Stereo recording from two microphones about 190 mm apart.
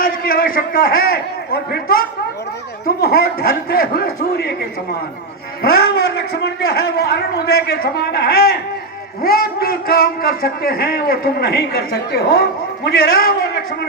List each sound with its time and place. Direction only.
0.0 s a sound: 50° left (ahead or behind)
2.8 s speech: 55° left (ahead or behind)
5.6 s a man's voice: 55° left (ahead or behind)